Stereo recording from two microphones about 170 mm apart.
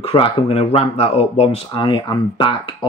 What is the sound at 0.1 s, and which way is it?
Speech, 35° left (ahead or behind).